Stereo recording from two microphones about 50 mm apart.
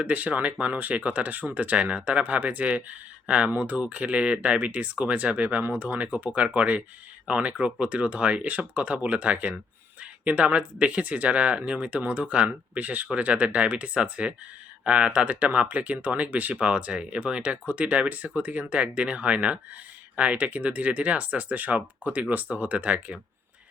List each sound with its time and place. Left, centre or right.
0.0 s speech: right
1.7 s speech: right